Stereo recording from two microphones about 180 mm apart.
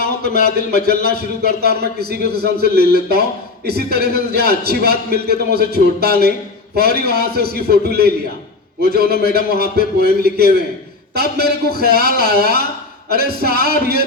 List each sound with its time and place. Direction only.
0.0 s a man's voice: 60° right (ahead or behind)